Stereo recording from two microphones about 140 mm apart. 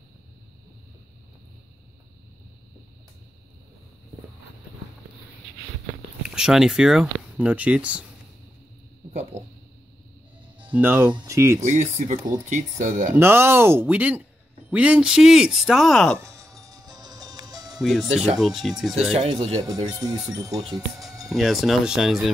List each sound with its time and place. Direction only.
6.2 s speech: 5° right (ahead or behind)
9.3 s a sound: 55° right (ahead or behind)
10.7 s speech: 15° right (ahead or behind)
11.6 s speech: 60° right (ahead or behind)
13.1 s speech: 15° right (ahead or behind); by 16.2 s 5° left (ahead or behind)
16.2 s music: 20° right (ahead or behind)
18.0 s speech: 50° right (ahead or behind)
18.4 s speech: centre (ahead or behind)
19.6 s speech: 25° right (ahead or behind)
21.3 s speech: centre (ahead or behind)